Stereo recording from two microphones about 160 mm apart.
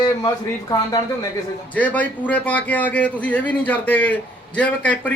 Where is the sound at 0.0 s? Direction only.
20° left (ahead or behind).